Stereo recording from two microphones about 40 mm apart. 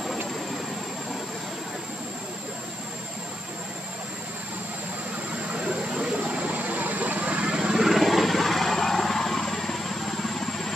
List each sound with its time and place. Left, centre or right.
6.2 s vehicle: right
7.5 s vehicle: centre